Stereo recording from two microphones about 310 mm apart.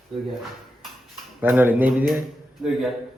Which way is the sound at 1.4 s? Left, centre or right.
Centre.